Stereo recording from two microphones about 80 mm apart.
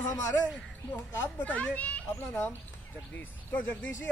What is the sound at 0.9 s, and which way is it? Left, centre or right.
A child's voice, centre.